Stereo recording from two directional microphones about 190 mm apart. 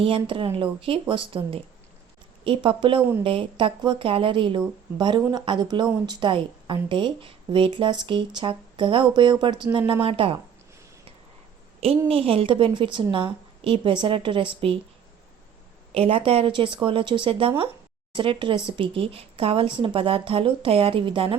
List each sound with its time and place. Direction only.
0.0 s speech: 25° right (ahead or behind)
11.8 s speech: 30° right (ahead or behind)
15.9 s speech: 30° right (ahead or behind)